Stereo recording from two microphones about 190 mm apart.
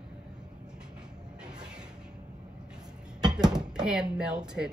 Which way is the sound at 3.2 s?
20° right (ahead or behind).